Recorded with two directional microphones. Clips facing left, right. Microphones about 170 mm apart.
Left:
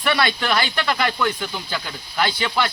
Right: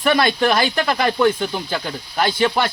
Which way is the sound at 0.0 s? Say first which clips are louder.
Right 5 dB; 45° right (ahead or behind).